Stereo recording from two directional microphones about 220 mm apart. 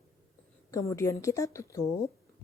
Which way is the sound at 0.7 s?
15° left (ahead or behind).